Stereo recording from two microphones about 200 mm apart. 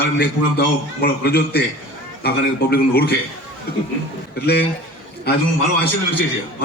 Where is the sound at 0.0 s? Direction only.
55° left (ahead or behind).